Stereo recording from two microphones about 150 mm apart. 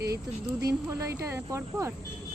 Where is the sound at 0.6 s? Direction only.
20° right (ahead or behind).